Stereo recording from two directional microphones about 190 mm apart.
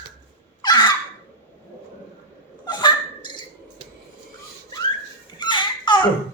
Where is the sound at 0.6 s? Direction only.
20° left (ahead or behind).